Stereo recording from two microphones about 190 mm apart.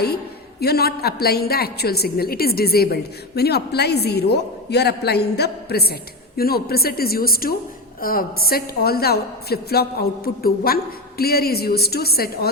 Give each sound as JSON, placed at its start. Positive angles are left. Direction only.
{"t": 0.6, "sound": "a woman's voice", "side_deg": 55}